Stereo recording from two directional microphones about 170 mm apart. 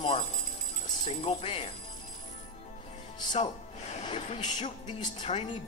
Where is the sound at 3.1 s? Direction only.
30° left (ahead or behind).